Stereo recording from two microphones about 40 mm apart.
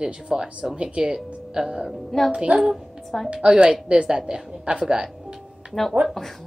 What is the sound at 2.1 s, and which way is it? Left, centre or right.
Speech, centre.